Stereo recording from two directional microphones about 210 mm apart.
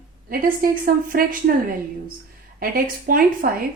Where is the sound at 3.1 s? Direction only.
45° right (ahead or behind).